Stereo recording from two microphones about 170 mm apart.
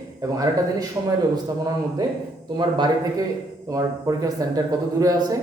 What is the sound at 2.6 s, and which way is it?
A man's voice, 25° right (ahead or behind).